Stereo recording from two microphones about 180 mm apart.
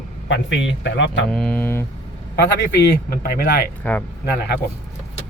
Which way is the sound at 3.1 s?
60° left (ahead or behind).